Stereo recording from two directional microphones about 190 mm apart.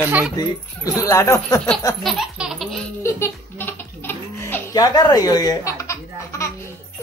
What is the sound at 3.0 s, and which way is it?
Baby laughter, 10° left (ahead or behind).